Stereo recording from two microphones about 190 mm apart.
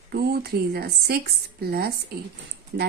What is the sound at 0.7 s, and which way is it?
Speech, 55° right (ahead or behind).